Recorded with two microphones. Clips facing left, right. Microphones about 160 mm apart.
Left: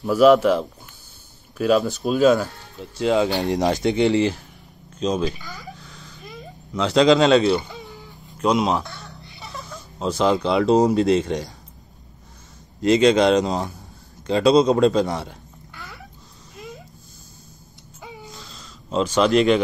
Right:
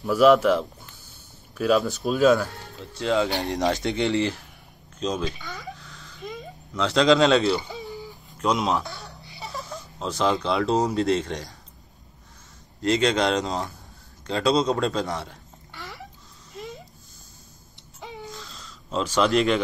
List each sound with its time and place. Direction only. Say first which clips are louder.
0.1 s a man's voice: left 3 dB; centre (ahead or behind)
2.8 s speech: left 4 dB; 15° left (ahead or behind)
3.7 s a man's voice: left 5 dB; 5° left (ahead or behind)
6.7 s a man's voice: left 3 dB; 5° left (ahead or behind)
10.3 s a man's voice: left 5 dB; 5° left (ahead or behind)
12.8 s speech: left 6 dB; 10° left (ahead or behind)
19.2 s a man's voice: left 4 dB; 5° left (ahead or behind)